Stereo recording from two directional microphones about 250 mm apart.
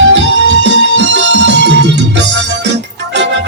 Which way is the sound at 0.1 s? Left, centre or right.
Right.